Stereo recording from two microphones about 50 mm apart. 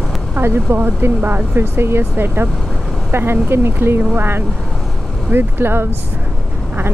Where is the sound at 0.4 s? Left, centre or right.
Right.